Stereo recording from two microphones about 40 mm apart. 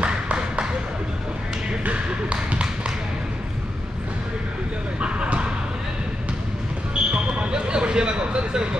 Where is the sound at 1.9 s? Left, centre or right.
Right.